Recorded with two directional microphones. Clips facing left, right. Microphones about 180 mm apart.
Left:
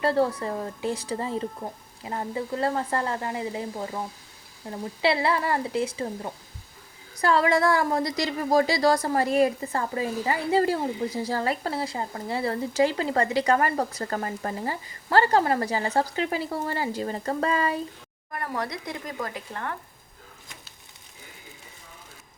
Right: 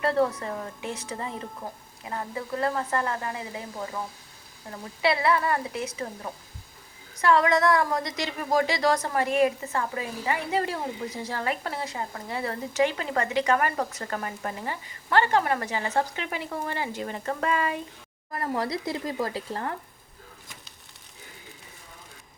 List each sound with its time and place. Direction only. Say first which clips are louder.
0.0 s speech: left 1 dB; 30° left (ahead or behind)
5.0 s speech: even; 30° left (ahead or behind)
18.3 s speech: right 3 dB; 25° right (ahead or behind)